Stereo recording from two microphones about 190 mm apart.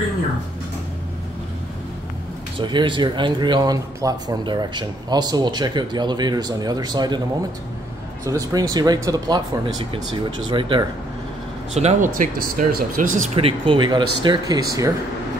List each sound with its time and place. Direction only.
2.6 s speech: 25° right (ahead or behind)
8.3 s speech: 20° right (ahead or behind)
11.7 s speech: 35° right (ahead or behind); by 14.9 s 20° right (ahead or behind)